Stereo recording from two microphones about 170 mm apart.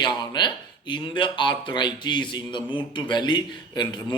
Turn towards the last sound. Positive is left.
turn(degrees=25)  # may be behind; listen again after turning